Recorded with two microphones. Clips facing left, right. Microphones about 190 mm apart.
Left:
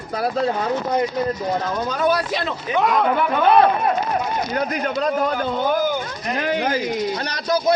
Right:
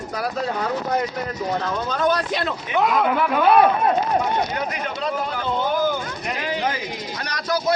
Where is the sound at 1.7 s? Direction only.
10° left (ahead or behind).